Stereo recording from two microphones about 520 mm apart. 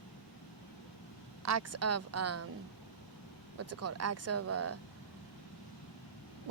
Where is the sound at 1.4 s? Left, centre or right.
Right.